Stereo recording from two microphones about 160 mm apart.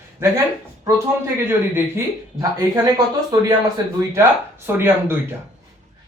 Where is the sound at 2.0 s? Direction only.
15° right (ahead or behind).